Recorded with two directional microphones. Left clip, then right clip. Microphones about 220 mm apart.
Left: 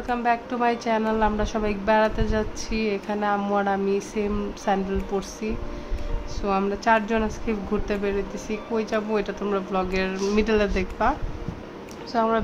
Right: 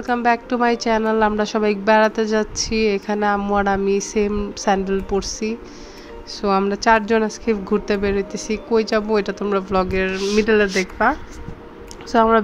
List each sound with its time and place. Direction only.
0.0 s a woman's voice: 30° right (ahead or behind)
9.9 s a woman's voice: 15° right (ahead or behind)